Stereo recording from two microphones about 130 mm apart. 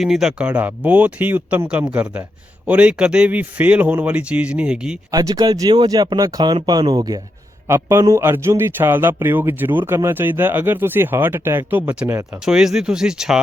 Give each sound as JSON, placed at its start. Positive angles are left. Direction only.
{"t": 0.0, "sound": "speech", "side_deg": -5}
{"t": 5.1, "sound": "speech", "side_deg": -30}
{"t": 7.7, "sound": "a man's voice", "side_deg": -20}
{"t": 12.5, "sound": "speech", "side_deg": -5}